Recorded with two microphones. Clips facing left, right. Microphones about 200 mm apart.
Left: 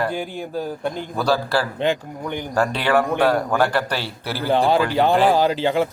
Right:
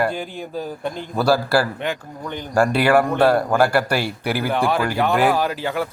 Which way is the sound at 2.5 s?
10° right (ahead or behind).